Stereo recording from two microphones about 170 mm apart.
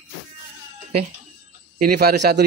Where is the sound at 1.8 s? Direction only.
65° right (ahead or behind).